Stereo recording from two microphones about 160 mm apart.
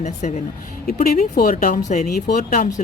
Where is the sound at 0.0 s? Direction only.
45° left (ahead or behind).